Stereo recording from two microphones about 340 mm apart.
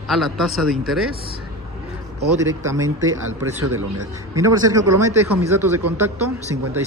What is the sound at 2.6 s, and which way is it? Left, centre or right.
Speech, centre.